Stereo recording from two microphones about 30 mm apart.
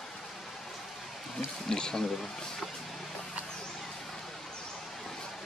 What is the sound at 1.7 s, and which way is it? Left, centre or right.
Speech, left.